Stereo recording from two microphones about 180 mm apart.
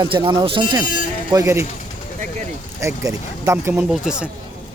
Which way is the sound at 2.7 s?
15° right (ahead or behind).